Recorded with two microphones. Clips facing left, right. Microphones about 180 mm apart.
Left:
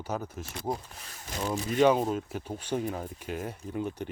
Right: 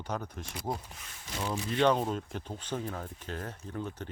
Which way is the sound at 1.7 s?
10° left (ahead or behind).